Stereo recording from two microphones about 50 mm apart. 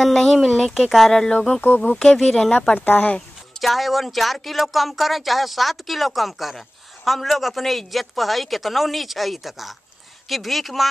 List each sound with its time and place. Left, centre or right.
0.0 s speech: centre
1.6 s speech: left
2.0 s speech: centre
2.5 s speech: left
3.6 s speech: centre